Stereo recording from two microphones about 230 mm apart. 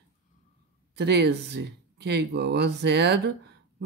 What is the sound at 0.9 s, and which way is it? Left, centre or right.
Speech, right.